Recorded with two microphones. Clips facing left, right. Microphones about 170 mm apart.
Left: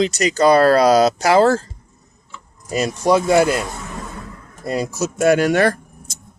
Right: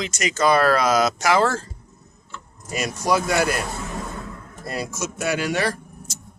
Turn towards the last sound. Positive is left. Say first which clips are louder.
# left 9 dB
turn(degrees=50)  # may be behind; listen again after turning